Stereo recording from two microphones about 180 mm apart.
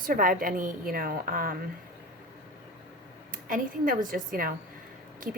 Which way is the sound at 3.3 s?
50° right (ahead or behind).